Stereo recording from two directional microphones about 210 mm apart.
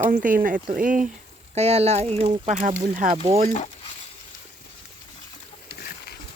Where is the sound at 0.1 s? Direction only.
40° right (ahead or behind).